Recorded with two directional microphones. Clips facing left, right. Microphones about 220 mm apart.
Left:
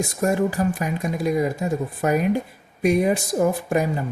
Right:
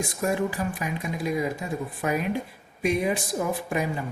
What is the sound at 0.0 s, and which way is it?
Speech, 45° left (ahead or behind).